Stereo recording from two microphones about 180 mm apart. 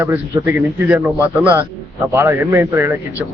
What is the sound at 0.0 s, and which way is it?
A man's voice, 10° right (ahead or behind).